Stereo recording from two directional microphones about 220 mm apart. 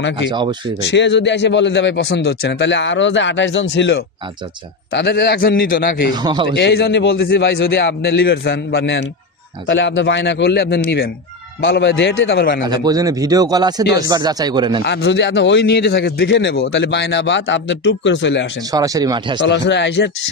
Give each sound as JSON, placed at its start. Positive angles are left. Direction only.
{"t": 0.3, "sound": "speech", "side_deg": -20}
{"t": 0.8, "sound": "a man's voice", "side_deg": 55}
{"t": 6.1, "sound": "speech", "side_deg": -20}
{"t": 6.5, "sound": "a man's voice", "side_deg": 50}
{"t": 12.6, "sound": "a man's voice", "side_deg": -15}
{"t": 14.8, "sound": "a man's voice", "side_deg": 55}
{"t": 18.7, "sound": "a man's voice", "side_deg": -15}
{"t": 19.4, "sound": "a man's voice", "side_deg": 50}